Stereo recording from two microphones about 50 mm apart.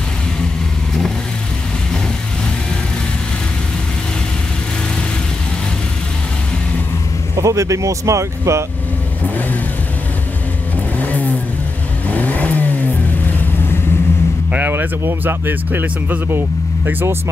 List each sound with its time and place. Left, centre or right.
7.3 s speech: right
11.0 s vehicle: left
14.7 s speech: right